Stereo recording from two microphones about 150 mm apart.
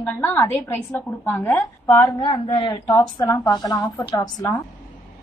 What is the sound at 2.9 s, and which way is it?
A woman's voice, 20° left (ahead or behind).